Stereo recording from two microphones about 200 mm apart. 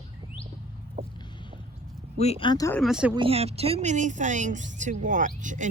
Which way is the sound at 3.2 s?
30° right (ahead or behind).